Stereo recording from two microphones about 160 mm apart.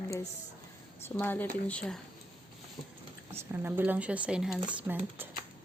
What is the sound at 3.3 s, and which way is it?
Speech, 15° right (ahead or behind).